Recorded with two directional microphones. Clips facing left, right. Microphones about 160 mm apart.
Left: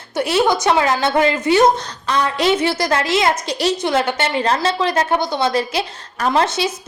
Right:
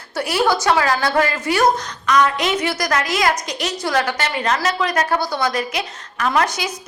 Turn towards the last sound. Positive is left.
turn(degrees=30)  # may be behind; listen again after turning